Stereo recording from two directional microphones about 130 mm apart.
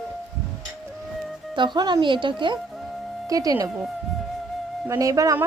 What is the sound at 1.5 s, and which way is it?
Speech, 35° right (ahead or behind).